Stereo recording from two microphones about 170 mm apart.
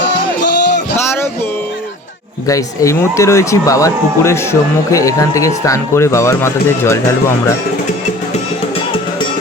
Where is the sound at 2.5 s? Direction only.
20° left (ahead or behind).